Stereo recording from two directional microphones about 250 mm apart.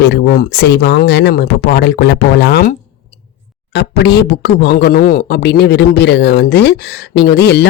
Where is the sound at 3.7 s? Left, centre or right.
Left.